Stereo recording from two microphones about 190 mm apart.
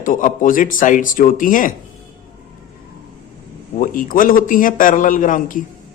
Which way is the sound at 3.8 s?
45° left (ahead or behind).